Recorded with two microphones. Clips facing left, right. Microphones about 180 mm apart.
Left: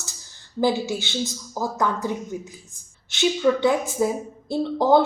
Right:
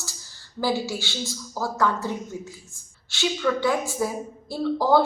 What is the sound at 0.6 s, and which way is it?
Speech, 20° left (ahead or behind).